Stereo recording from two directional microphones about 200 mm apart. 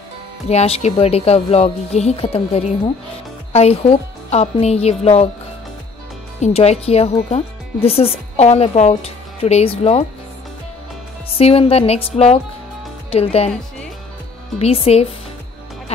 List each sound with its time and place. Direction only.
0.5 s speech: 30° left (ahead or behind)
6.4 s speech: 30° left (ahead or behind)
11.3 s speech: 30° left (ahead or behind)
14.6 s speech: 30° left (ahead or behind)